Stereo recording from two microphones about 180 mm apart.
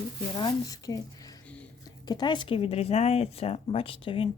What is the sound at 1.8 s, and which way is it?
Speech, 25° left (ahead or behind).